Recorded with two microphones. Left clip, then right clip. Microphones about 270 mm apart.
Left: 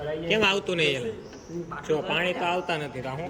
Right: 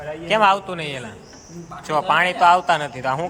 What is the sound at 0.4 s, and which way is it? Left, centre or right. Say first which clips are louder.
Speech: right 6 dB; centre.